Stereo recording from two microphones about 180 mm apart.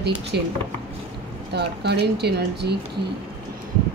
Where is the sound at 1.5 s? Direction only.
65° right (ahead or behind).